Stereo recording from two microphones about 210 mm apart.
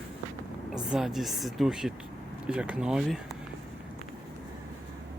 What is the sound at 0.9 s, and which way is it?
Speech, centre (ahead or behind).